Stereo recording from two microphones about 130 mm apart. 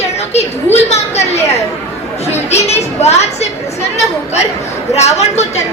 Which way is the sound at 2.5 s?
55° left (ahead or behind).